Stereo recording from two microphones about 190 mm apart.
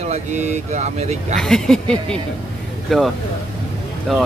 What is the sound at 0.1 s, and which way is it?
Speech, 35° right (ahead or behind).